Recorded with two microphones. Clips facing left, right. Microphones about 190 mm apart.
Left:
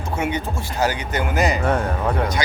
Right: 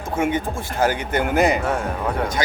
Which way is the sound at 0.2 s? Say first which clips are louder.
Right 4 dB; 50° right (ahead or behind).